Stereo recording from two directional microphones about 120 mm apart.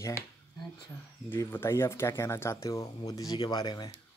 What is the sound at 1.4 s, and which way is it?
Speech, 20° left (ahead or behind).